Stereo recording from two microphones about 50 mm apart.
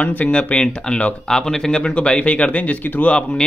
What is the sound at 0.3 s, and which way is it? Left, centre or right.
Speech, left.